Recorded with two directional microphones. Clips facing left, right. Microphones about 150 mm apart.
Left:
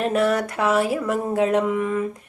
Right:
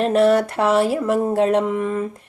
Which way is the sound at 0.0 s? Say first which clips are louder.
Right 5 dB; 30° right (ahead or behind).